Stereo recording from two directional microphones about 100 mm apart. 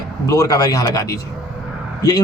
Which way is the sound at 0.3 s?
35° left (ahead or behind).